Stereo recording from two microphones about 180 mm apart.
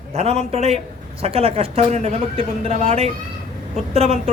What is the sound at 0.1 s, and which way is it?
Speech, 35° right (ahead or behind).